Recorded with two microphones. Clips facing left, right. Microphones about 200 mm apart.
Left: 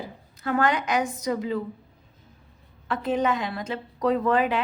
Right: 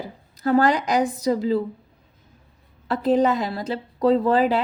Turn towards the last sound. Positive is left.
turn(degrees=-30)  # may be behind; listen again after turning